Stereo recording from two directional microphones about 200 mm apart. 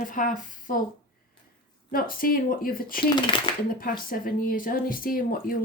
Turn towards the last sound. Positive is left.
turn(degrees=45)  # may be behind; listen again after turning